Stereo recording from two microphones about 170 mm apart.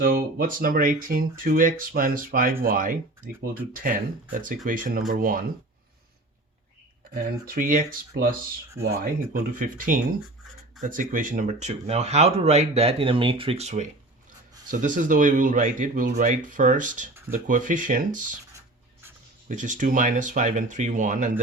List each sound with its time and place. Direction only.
0.0 s speech: 60° right (ahead or behind)
7.1 s speech: 55° right (ahead or behind)
19.5 s speech: 50° right (ahead or behind)